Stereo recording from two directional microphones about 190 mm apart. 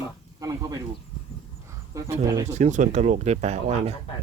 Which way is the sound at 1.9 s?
15° right (ahead or behind).